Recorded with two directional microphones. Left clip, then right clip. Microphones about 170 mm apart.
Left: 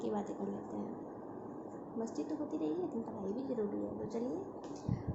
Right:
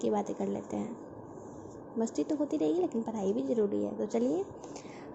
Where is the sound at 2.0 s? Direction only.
30° right (ahead or behind).